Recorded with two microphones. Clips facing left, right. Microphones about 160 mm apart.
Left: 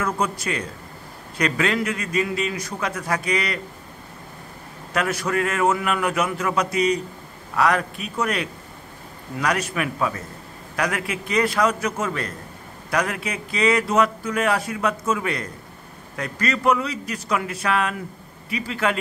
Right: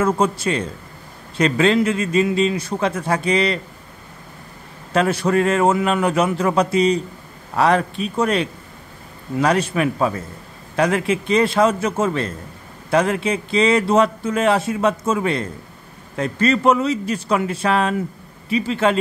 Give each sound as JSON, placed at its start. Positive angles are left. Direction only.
{"t": 0.0, "sound": "speech", "side_deg": -25}
{"t": 4.9, "sound": "speech", "side_deg": -30}